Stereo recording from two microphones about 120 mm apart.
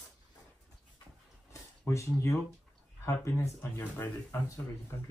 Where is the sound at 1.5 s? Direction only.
25° left (ahead or behind).